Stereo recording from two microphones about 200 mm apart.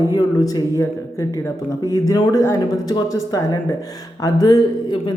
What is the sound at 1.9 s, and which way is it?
Speech, 20° left (ahead or behind).